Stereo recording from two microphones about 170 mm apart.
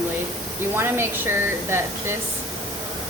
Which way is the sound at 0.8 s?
15° right (ahead or behind).